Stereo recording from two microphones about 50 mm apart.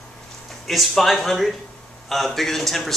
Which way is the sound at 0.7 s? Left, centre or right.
Centre.